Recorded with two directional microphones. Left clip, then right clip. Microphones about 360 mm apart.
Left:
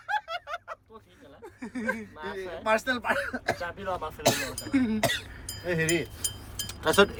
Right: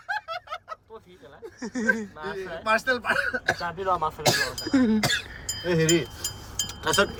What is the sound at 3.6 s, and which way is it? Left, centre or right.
Speech, centre.